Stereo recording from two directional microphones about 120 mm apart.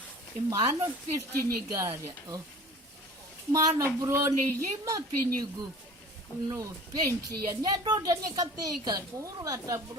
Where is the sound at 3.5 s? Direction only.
25° right (ahead or behind).